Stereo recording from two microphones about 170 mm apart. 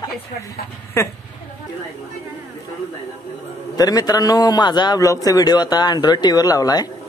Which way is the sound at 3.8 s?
20° left (ahead or behind).